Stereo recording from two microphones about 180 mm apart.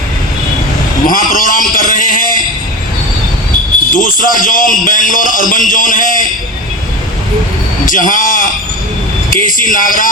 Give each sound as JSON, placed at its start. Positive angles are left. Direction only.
{"t": 1.0, "sound": "a sound", "side_deg": 50}
{"t": 3.9, "sound": "a man's voice", "side_deg": 50}
{"t": 7.9, "sound": "a man's voice", "side_deg": 50}